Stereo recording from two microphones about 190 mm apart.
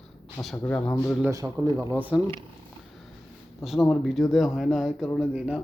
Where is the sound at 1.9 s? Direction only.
10° right (ahead or behind).